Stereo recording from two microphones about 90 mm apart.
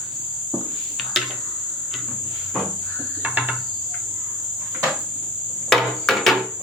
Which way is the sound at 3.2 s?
20° right (ahead or behind).